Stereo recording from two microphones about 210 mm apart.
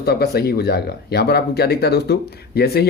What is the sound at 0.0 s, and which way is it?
Speech, 50° left (ahead or behind).